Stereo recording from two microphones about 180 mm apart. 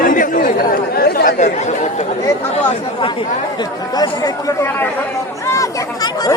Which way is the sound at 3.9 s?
20° left (ahead or behind).